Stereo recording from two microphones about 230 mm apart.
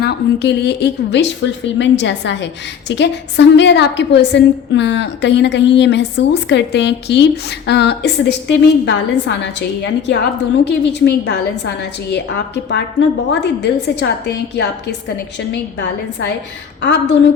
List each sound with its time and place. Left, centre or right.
0.0 s a woman's voice: left
16.8 s a woman's voice: left